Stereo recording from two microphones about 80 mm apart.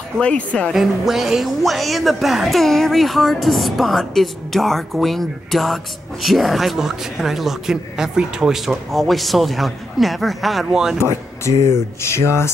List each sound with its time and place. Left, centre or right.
0.2 s speech: centre
0.7 s a woman's voice: centre
11.0 s speech: left